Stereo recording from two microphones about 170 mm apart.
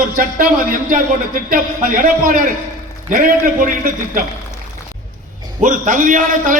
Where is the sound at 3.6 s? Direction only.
55° right (ahead or behind).